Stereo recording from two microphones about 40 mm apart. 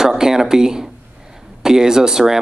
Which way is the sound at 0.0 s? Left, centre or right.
Centre.